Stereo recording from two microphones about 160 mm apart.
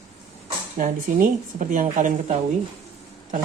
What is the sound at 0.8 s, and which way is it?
Speech, 55° right (ahead or behind).